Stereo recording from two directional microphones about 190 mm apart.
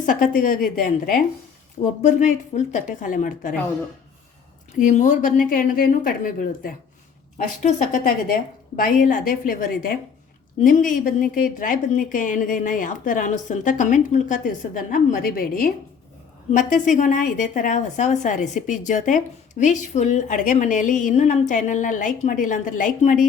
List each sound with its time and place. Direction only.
0.0 s a woman's voice: 45° left (ahead or behind)
4.8 s a woman's voice: 40° left (ahead or behind)